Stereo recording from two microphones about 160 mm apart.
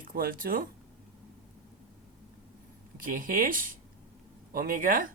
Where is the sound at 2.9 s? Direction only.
60° right (ahead or behind).